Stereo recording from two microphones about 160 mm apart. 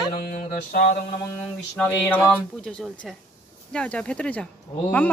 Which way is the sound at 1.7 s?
5° left (ahead or behind).